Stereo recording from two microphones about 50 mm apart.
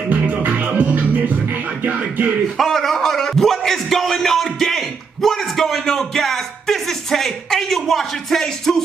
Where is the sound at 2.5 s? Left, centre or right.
Centre.